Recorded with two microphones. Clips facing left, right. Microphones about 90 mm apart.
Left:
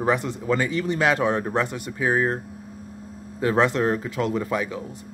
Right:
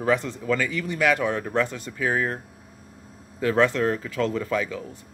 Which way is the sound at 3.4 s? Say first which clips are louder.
Left 1 dB; 20° left (ahead or behind).